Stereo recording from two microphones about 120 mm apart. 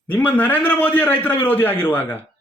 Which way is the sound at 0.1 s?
15° left (ahead or behind).